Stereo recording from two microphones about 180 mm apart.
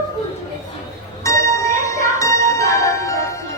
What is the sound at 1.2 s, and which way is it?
Music, 15° left (ahead or behind).